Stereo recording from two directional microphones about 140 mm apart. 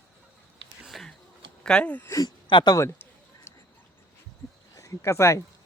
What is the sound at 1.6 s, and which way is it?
Speech, 5° left (ahead or behind).